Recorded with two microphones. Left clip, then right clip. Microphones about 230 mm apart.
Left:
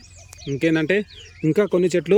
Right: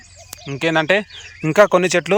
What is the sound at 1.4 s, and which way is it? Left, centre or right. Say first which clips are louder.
Speech: right 6 dB; right.